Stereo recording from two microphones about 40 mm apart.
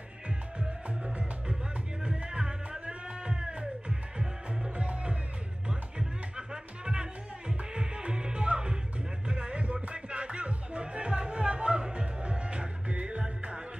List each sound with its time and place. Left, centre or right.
0.6 s music: right
4.7 s music: right